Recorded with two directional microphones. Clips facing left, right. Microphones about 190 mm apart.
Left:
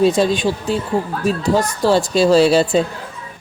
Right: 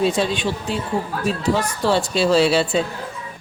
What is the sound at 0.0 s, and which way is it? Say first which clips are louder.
A woman's voice: left 5 dB; 40° left (ahead or behind).